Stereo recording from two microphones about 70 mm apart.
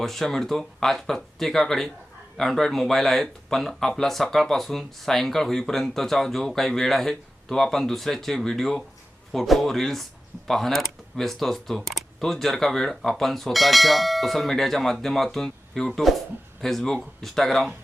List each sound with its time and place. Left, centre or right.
0.0 s speech: centre